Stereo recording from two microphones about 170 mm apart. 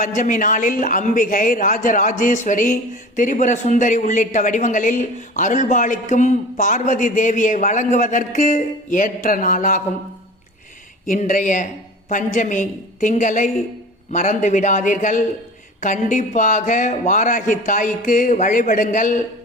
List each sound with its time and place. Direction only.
0.0 s a man's voice: 50° left (ahead or behind)
11.0 s a man's voice: 50° left (ahead or behind)